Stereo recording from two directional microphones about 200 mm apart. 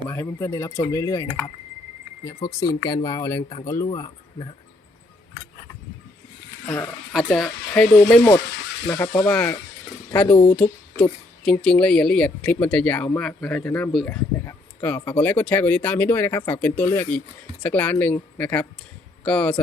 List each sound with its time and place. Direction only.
0.1 s speech: 15° left (ahead or behind)
6.7 s speech: centre (ahead or behind)